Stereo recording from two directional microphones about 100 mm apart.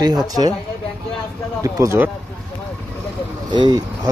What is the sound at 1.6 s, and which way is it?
Speech, 30° right (ahead or behind).